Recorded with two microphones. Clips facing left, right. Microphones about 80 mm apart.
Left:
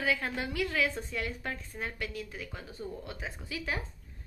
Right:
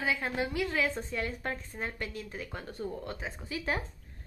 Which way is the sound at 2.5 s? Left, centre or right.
Right.